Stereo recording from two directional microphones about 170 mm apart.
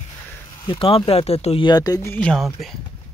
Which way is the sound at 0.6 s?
30° left (ahead or behind).